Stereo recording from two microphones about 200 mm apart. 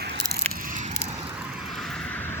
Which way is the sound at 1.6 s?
Centre (ahead or behind).